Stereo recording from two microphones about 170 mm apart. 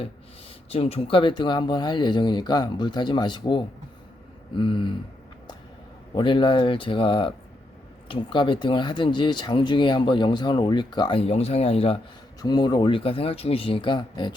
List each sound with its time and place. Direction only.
0.7 s speech: 35° left (ahead or behind)
6.1 s speech: 30° left (ahead or behind)
12.4 s speech: 25° left (ahead or behind)